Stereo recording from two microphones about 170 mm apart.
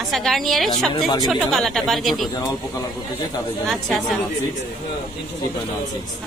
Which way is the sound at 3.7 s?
Centre (ahead or behind).